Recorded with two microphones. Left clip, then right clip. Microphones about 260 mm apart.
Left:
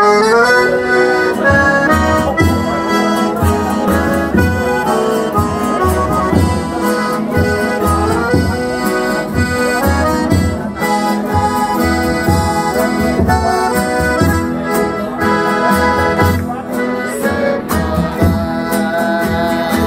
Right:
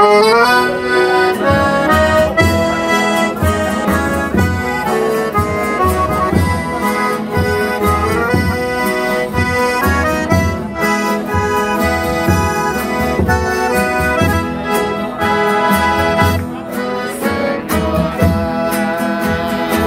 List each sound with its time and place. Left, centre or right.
0.0 s accordion: right